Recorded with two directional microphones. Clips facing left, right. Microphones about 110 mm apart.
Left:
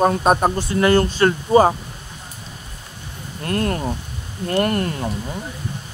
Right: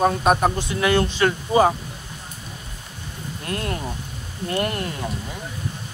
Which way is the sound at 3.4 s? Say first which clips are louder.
Left 6 dB; 45° left (ahead or behind).